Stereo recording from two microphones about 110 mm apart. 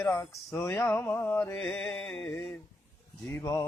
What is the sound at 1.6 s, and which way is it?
Music, 10° left (ahead or behind).